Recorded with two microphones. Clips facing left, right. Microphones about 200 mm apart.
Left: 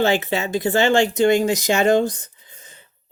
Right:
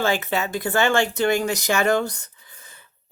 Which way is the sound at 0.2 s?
20° left (ahead or behind).